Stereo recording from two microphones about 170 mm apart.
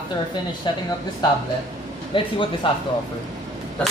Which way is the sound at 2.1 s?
30° left (ahead or behind).